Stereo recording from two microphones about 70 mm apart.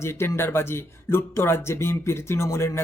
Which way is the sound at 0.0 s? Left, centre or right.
Left.